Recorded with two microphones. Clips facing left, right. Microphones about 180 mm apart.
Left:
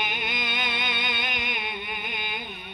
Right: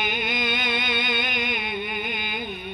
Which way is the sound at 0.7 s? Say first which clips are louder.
Right 5 dB; 45° right (ahead or behind).